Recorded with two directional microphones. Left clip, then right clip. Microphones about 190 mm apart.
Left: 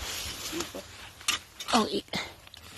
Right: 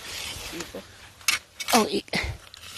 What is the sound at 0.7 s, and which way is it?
Speech, 55° right (ahead or behind).